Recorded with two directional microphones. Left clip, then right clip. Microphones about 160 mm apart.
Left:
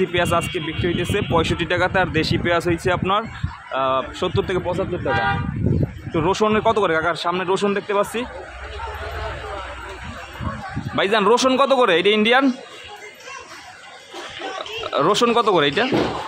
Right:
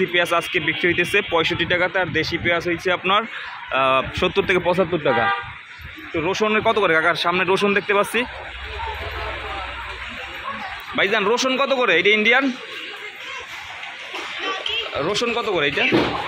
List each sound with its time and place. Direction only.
0.0 s speech: 15° left (ahead or behind)
0.6 s a man's voice: centre (ahead or behind)
1.3 s speech: 15° left (ahead or behind)
3.7 s a man's voice: centre (ahead or behind)
4.6 s speech: 25° right (ahead or behind)
6.1 s speech: 30° left (ahead or behind)
6.5 s a man's voice: 15° left (ahead or behind)
11.0 s speech: 25° left (ahead or behind)
15.0 s speech: 45° left (ahead or behind)